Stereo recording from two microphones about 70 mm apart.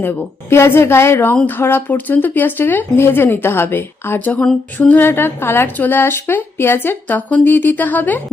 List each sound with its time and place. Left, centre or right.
0.5 s a woman's voice: left